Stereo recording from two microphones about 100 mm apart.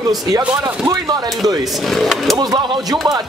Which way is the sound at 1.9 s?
5° left (ahead or behind).